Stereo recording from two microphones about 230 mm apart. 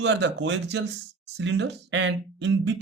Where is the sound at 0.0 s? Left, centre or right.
Right.